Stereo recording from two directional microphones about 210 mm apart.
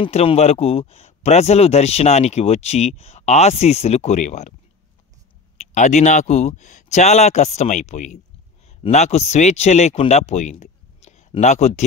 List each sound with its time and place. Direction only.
0.0 s a man's voice: 30° left (ahead or behind)
5.6 s a man's voice: 35° left (ahead or behind)